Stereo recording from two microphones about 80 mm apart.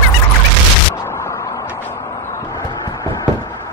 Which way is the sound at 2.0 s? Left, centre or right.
Left.